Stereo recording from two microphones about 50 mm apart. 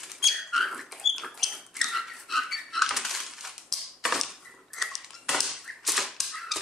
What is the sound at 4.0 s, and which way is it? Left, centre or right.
Typewriter, centre.